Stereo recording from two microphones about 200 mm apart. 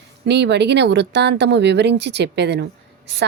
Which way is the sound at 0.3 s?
60° right (ahead or behind).